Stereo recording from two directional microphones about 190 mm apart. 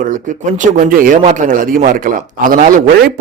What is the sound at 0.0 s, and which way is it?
A man's voice, 45° right (ahead or behind).